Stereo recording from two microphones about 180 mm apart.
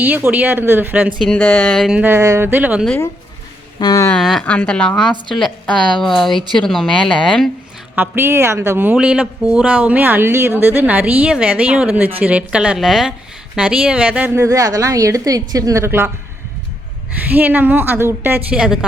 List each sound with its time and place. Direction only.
0.0 s speech: 10° right (ahead or behind)
1.2 s speech: 10° left (ahead or behind); by 2.8 s 10° right (ahead or behind)
3.8 s speech: 20° left (ahead or behind)
4.1 s speech: centre (ahead or behind)
7.9 s speech: 10° right (ahead or behind)
17.3 s speech: 10° right (ahead or behind)